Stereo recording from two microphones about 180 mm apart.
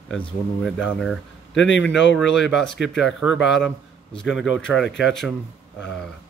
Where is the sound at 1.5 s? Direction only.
90° left.